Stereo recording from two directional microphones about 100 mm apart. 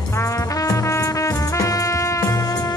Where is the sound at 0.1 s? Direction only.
30° left (ahead or behind).